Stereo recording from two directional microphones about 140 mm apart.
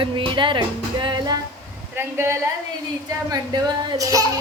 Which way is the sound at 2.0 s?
20° right (ahead or behind).